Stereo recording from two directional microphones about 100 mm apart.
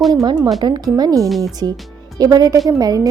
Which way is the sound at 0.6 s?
40° right (ahead or behind).